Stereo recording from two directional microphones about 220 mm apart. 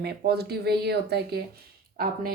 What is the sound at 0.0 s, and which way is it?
Speech, 45° right (ahead or behind).